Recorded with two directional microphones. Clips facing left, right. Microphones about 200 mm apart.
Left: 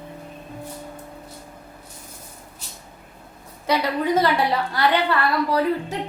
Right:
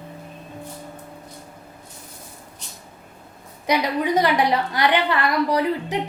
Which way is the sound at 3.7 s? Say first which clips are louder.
Even; 15° right (ahead or behind).